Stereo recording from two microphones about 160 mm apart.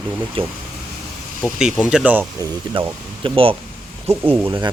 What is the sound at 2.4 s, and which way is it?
Speech, 25° right (ahead or behind).